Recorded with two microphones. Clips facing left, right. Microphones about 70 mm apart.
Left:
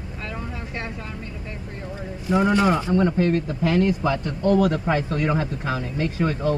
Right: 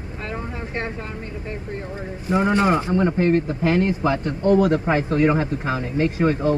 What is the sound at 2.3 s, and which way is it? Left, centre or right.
A man's voice, right.